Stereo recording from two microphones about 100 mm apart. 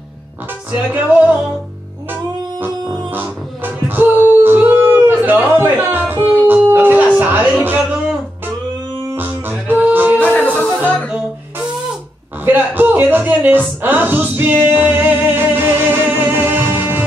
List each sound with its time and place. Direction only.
0.7 s music: 15° right (ahead or behind)
3.1 s music: 20° right (ahead or behind)
9.1 s music: 20° right (ahead or behind)
10.3 s music: 15° left (ahead or behind)
12.4 s music: 20° right (ahead or behind)